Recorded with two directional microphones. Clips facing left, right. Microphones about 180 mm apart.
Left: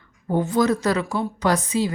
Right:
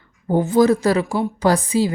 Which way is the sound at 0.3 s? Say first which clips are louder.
Right 5 dB; 25° right (ahead or behind).